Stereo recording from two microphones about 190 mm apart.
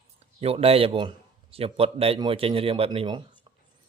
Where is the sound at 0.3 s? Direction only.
30° right (ahead or behind).